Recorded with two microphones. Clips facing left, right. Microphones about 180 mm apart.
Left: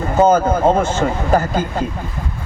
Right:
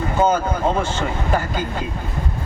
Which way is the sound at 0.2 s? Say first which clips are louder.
Left 6 dB; 45° left (ahead or behind).